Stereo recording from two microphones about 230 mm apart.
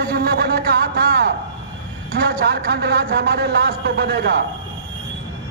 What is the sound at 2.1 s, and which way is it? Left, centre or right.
Speech, right.